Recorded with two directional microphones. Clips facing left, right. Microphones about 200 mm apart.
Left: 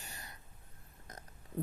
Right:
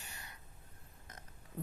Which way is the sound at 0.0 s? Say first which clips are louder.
Left 2 dB; 35° left (ahead or behind).